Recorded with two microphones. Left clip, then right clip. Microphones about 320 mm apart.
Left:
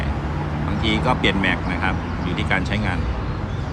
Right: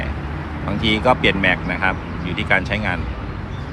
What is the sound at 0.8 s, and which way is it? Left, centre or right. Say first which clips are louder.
Speech: right 4 dB; centre.